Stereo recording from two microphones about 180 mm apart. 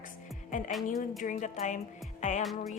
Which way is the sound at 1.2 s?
45° left (ahead or behind).